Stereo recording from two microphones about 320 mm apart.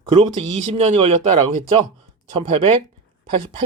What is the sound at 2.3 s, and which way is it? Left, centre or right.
Speech, centre.